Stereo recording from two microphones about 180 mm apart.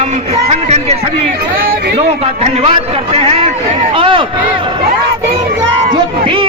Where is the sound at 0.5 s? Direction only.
35° right (ahead or behind).